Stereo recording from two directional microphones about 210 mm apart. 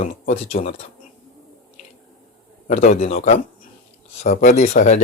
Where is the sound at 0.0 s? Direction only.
35° left (ahead or behind).